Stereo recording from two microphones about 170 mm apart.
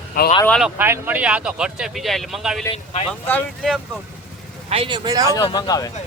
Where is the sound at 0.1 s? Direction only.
55° left (ahead or behind).